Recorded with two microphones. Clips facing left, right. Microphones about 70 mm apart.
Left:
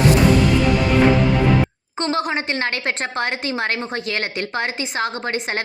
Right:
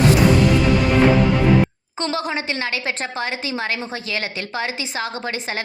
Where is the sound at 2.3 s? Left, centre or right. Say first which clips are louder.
Left 2 dB; left.